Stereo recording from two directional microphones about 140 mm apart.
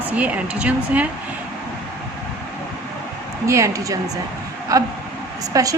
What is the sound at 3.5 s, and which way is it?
Speech, 25° right (ahead or behind).